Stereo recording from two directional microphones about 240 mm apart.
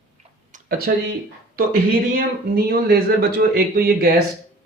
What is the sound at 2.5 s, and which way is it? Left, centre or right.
A man's voice, right.